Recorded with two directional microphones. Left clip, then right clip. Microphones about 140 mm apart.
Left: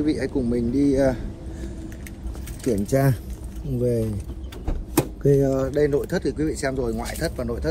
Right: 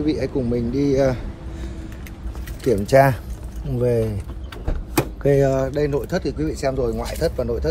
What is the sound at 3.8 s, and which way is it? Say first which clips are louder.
Speech: right 4 dB; 60° right (ahead or behind).